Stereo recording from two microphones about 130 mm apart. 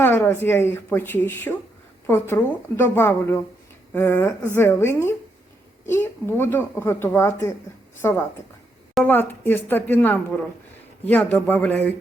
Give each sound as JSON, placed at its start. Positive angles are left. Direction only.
{"t": 0.0, "sound": "a woman's voice", "side_deg": 15}